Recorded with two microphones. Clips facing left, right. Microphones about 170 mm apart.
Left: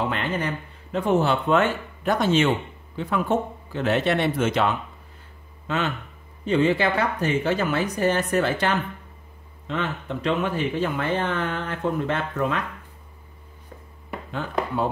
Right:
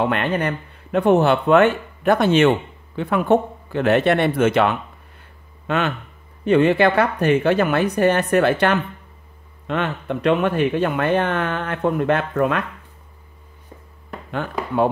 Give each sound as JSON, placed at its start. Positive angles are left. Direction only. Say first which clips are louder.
{"t": 0.0, "sound": "speech", "louder": "right 6 dB", "side_deg": -65}